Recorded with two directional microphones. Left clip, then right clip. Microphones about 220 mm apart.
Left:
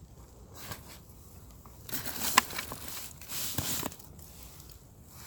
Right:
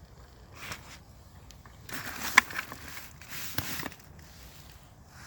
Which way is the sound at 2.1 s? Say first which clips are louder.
Right 4 dB; 20° left (ahead or behind).